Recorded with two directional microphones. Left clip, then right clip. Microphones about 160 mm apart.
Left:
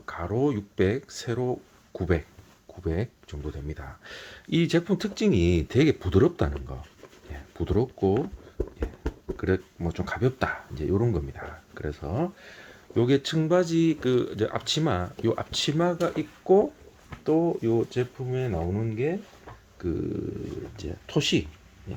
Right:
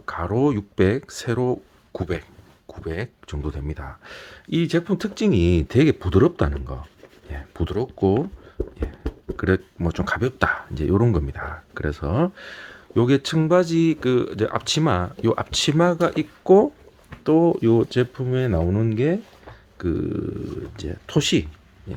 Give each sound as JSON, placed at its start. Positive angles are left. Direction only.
{"t": 0.0, "sound": "speech", "side_deg": -25}
{"t": 9.3, "sound": "speech", "side_deg": -30}
{"t": 17.6, "sound": "speech", "side_deg": -65}
{"t": 19.8, "sound": "speech", "side_deg": -25}